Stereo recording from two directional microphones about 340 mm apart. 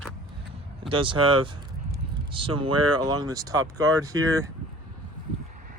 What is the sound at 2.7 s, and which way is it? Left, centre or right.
Speech, right.